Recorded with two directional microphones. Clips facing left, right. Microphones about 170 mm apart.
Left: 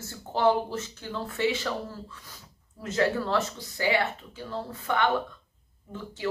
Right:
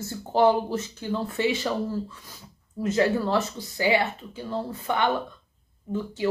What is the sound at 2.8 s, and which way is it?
A woman's voice, 15° right (ahead or behind).